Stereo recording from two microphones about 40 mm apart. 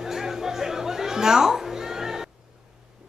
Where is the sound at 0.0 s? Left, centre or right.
Centre.